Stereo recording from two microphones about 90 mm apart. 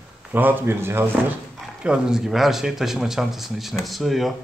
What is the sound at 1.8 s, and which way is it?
A man's voice, 10° right (ahead or behind).